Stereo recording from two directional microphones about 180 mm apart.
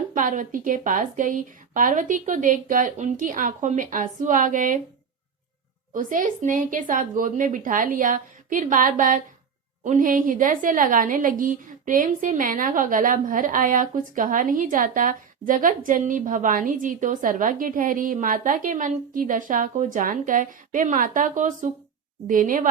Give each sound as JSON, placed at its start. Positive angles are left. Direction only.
{"t": 0.1, "sound": "a woman's voice", "side_deg": -45}
{"t": 5.9, "sound": "a woman's voice", "side_deg": -50}